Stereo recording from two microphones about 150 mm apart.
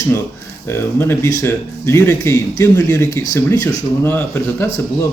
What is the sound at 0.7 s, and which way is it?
Speech, 15° left (ahead or behind).